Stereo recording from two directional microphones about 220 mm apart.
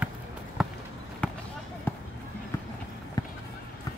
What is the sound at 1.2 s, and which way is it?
Basketball bounce, 5° left (ahead or behind).